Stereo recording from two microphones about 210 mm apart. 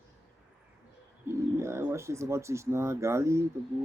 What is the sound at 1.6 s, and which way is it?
Speech, 15° right (ahead or behind).